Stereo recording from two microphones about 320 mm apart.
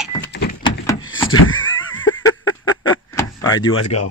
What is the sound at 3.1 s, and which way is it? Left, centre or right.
Door, centre.